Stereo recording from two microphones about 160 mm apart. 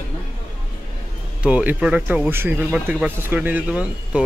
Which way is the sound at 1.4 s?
10° right (ahead or behind).